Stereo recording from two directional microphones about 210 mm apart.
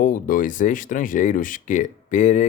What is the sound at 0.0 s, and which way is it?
Speech, 40° left (ahead or behind).